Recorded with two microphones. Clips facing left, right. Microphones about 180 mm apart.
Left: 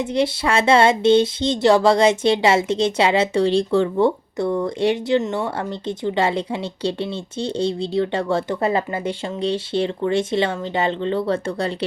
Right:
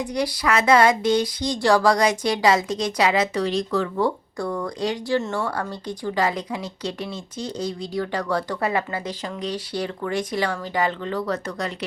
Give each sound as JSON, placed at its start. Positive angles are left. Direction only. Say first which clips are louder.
{"t": 0.0, "sound": "speech", "louder": "left 4 dB", "side_deg": 25}